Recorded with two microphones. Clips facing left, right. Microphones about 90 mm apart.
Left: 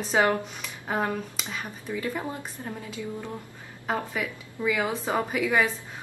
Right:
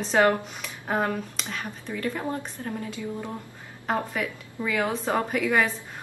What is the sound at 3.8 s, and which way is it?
Speech, centre (ahead or behind).